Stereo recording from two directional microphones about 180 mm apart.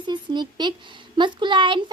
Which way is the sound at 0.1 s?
25° right (ahead or behind).